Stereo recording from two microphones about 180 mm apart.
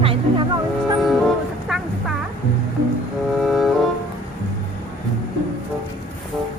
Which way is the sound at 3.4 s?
Centre (ahead or behind).